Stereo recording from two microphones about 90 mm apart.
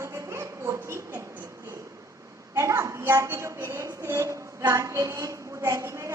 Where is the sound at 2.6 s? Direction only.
35° right (ahead or behind).